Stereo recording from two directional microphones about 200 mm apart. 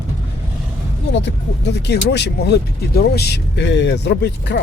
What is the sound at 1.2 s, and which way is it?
Speech, 55° left (ahead or behind).